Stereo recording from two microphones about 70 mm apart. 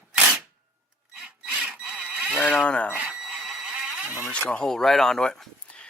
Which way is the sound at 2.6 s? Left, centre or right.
Centre.